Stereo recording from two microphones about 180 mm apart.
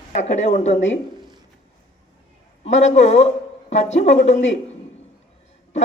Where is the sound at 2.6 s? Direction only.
35° left (ahead or behind).